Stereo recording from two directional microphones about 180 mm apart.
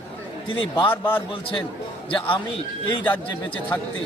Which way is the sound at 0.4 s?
30° left (ahead or behind).